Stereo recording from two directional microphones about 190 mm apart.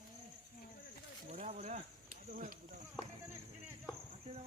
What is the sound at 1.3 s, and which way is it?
Speech, 35° right (ahead or behind).